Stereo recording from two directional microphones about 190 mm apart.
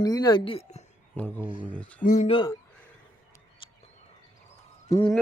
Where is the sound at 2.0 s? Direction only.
40° left (ahead or behind).